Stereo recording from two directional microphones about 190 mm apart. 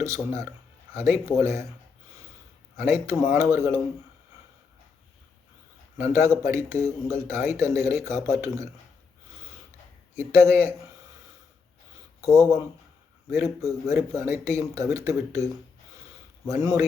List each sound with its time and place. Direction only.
0.0 s speech: 15° right (ahead or behind)
2.7 s speech: 15° right (ahead or behind)
6.0 s speech: 15° right (ahead or behind)
10.2 s speech: 15° right (ahead or behind)
12.2 s speech: 15° right (ahead or behind)
16.5 s speech: 15° right (ahead or behind)